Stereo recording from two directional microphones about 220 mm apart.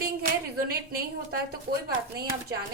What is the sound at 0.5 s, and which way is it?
Speech, 45° right (ahead or behind).